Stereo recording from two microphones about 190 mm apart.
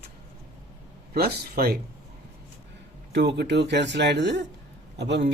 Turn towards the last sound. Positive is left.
turn(degrees=-65)  # may be behind; listen again after turning